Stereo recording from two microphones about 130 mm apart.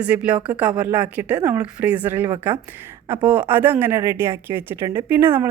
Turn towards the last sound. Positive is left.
turn(degrees=-15)  # may be behind; listen again after turning